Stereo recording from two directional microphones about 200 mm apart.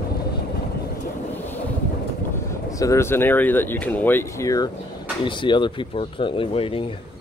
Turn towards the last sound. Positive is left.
turn(degrees=25)  # may be behind; listen again after turning